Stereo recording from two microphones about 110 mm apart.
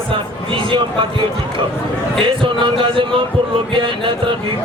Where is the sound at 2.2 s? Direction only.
50° right (ahead or behind).